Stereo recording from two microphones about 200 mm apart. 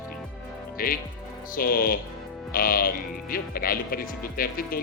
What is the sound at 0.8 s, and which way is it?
Speech, 45° left (ahead or behind).